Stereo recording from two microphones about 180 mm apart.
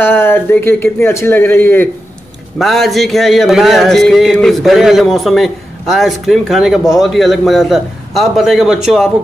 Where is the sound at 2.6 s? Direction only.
Centre (ahead or behind).